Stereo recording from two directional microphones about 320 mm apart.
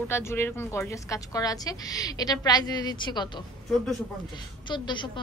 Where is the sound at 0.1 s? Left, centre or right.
Centre.